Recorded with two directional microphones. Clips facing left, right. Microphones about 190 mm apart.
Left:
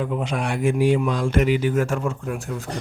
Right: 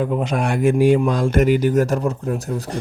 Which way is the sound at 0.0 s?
45° right (ahead or behind).